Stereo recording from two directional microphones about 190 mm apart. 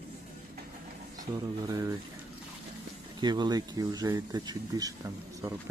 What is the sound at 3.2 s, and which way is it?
Speech, 20° right (ahead or behind).